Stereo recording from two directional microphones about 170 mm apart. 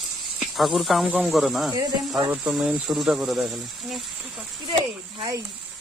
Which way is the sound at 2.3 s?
10° right (ahead or behind).